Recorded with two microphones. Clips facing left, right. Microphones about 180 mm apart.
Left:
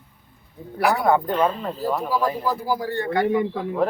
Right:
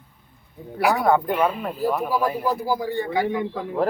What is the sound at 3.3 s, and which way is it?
Speech, 5° left (ahead or behind).